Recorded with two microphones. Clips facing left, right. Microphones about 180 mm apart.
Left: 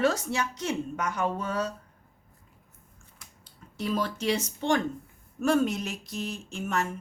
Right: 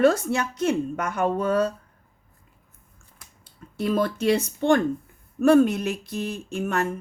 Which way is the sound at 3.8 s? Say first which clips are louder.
Right 6 dB; 55° right (ahead or behind).